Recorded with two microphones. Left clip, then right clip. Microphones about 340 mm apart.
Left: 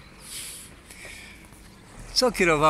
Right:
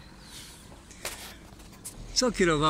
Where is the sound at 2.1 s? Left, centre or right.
Centre.